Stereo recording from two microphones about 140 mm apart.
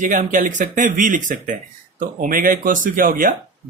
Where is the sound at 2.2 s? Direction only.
75° right (ahead or behind).